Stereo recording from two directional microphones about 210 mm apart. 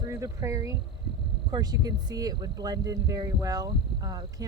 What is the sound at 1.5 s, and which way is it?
Speech, 20° right (ahead or behind).